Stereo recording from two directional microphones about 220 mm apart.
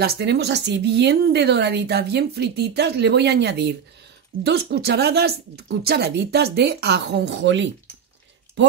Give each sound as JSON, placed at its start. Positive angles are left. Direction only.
{"t": 0.0, "sound": "speech", "side_deg": -45}